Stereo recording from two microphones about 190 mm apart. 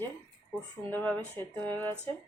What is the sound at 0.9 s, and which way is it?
Speech, 10° left (ahead or behind).